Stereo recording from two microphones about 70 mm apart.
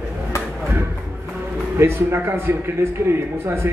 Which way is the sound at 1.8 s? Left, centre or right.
Right.